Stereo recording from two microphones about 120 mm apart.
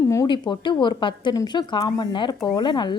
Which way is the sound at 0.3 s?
40° left (ahead or behind).